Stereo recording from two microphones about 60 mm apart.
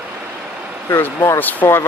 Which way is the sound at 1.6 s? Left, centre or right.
Left.